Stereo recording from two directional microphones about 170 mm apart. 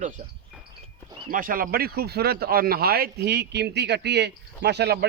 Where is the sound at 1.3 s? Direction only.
55° right (ahead or behind).